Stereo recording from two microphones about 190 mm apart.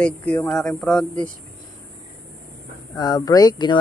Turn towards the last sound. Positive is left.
turn(degrees=20)  # may be behind; listen again after turning